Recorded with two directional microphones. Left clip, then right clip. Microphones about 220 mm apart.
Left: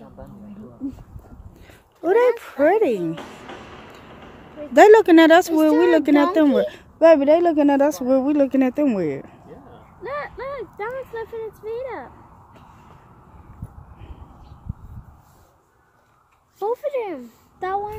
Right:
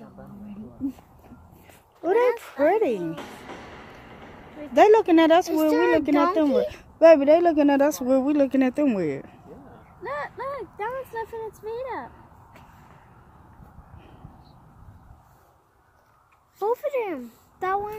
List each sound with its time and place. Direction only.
2.0 s speech: 20° left (ahead or behind)
4.7 s speech: 20° left (ahead or behind)
6.7 s speech: centre (ahead or behind)
10.0 s a sound: 55° right (ahead or behind)
11.3 s vehicle: 60° right (ahead or behind)
16.6 s a sound: 45° right (ahead or behind)